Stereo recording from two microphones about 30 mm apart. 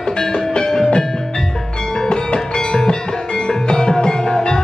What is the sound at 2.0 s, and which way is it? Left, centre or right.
Music, left.